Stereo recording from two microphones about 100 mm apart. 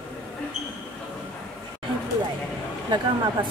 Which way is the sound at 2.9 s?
50° right (ahead or behind).